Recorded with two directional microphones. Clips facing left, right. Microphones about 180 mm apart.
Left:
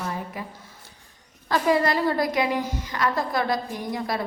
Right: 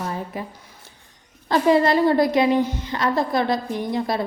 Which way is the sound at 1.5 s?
25° right (ahead or behind).